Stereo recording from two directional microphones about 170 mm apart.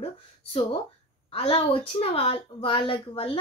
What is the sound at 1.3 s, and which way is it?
Speech, 35° left (ahead or behind).